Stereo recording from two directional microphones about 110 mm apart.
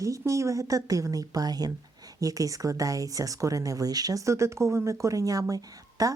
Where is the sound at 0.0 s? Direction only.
30° right (ahead or behind).